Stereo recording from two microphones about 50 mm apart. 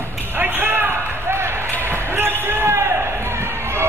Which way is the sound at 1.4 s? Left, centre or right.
Right.